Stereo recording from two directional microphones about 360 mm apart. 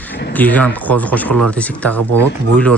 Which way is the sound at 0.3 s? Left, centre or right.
Centre.